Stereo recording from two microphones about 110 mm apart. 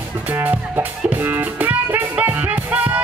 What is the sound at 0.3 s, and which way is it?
Music, 20° right (ahead or behind).